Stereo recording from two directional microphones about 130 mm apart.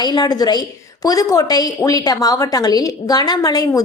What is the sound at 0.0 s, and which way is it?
A woman's voice, 30° left (ahead or behind).